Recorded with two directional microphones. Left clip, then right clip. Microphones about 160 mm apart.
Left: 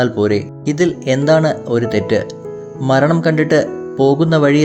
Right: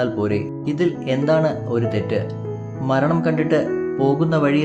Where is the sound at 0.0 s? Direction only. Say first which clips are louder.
Left 6 dB; 30° left (ahead or behind).